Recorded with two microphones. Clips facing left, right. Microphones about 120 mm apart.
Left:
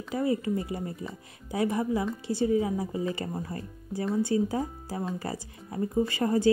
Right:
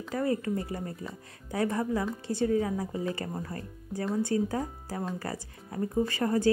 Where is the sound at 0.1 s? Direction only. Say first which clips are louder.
Left 2 dB; 10° left (ahead or behind).